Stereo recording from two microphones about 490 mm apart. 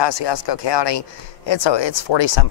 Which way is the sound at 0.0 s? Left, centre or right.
Left.